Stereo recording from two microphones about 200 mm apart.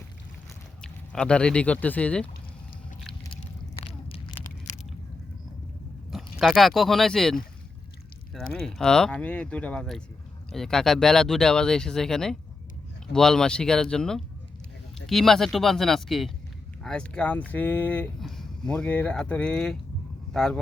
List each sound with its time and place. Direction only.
0.8 s speech: 5° left (ahead or behind)
3.8 s a sound: 30° left (ahead or behind)
6.1 s speech: centre (ahead or behind)